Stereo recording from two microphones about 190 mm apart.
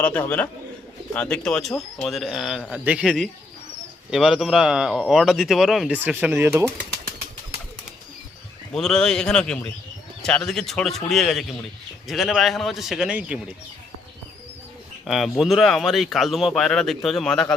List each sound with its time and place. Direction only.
0.0 s a man's voice: 10° left (ahead or behind); by 6.7 s 10° right (ahead or behind)
8.7 s speech: 5° left (ahead or behind)
15.0 s speech: centre (ahead or behind)